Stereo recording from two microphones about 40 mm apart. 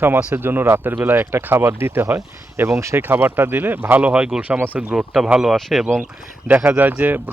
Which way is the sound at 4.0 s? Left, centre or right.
Right.